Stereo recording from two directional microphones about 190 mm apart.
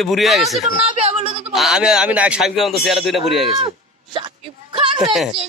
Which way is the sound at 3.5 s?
25° right (ahead or behind).